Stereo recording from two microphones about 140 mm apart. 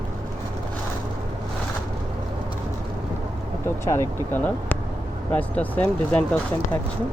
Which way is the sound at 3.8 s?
20° left (ahead or behind).